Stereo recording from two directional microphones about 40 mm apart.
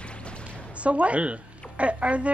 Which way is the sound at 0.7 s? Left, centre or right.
Right.